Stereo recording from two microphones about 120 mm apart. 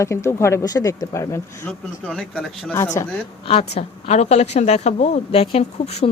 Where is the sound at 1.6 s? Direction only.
10° left (ahead or behind).